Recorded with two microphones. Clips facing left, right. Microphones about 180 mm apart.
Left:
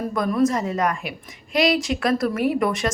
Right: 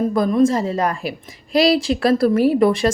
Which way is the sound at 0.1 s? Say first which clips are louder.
Right 1 dB; 25° right (ahead or behind).